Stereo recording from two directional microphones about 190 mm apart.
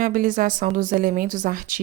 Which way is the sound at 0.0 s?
45° right (ahead or behind).